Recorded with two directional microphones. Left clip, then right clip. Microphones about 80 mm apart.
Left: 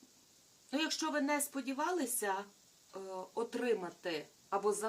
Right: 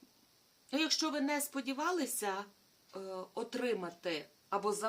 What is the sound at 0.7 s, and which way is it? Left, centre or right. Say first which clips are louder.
Speech: right 2 dB; right.